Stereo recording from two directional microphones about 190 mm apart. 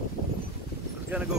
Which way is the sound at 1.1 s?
5° right (ahead or behind).